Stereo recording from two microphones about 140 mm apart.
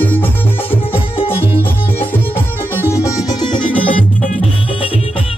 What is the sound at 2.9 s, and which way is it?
Music, 25° left (ahead or behind).